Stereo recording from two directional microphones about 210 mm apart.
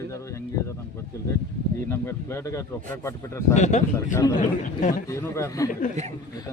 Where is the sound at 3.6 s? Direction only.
35° left (ahead or behind).